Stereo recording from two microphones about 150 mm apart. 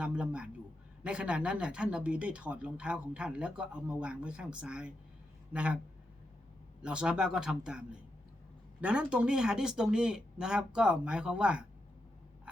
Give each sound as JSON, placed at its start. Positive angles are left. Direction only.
{"t": 0.0, "sound": "speech", "side_deg": -5}
{"t": 6.8, "sound": "speech", "side_deg": -5}